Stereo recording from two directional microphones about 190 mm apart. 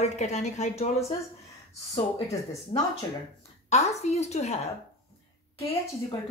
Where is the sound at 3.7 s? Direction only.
35° left (ahead or behind).